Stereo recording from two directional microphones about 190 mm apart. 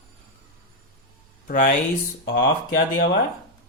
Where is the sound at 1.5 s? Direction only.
45° left (ahead or behind).